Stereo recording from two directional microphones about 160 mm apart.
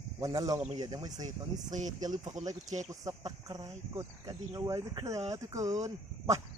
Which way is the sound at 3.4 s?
20° right (ahead or behind).